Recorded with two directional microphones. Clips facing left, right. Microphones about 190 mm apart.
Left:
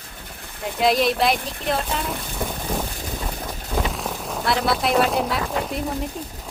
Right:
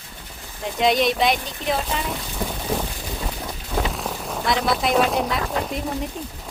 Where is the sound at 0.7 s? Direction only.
5° left (ahead or behind).